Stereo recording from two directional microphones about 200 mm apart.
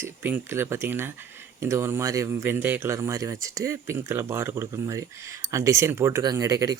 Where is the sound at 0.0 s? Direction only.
10° right (ahead or behind).